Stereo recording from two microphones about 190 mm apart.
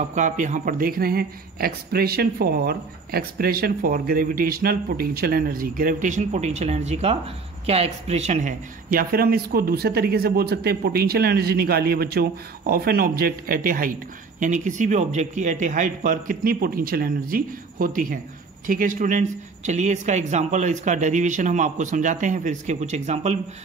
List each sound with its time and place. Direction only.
0.1 s a man's voice: 40° right (ahead or behind)